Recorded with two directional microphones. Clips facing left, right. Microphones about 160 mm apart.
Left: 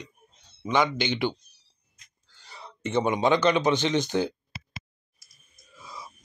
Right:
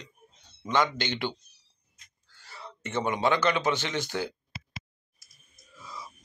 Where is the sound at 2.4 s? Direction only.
20° left (ahead or behind).